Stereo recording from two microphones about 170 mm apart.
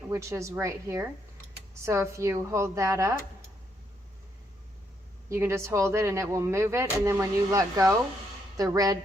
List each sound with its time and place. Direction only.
0.1 s speech: 15° right (ahead or behind)
5.3 s speech: 15° right (ahead or behind)